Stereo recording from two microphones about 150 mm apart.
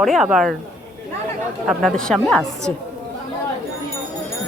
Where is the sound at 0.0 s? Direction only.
Centre (ahead or behind).